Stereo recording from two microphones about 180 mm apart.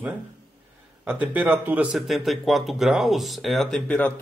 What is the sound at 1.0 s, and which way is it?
Speech, 10° right (ahead or behind).